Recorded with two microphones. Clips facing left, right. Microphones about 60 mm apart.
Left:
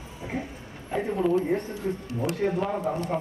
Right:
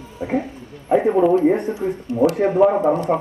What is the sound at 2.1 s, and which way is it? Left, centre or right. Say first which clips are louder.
Speech: right 12 dB; right.